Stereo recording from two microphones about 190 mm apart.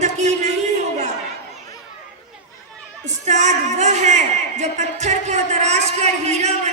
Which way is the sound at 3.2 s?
40° right (ahead or behind).